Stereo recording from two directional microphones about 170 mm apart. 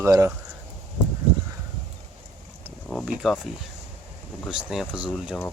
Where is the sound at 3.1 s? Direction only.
5° right (ahead or behind).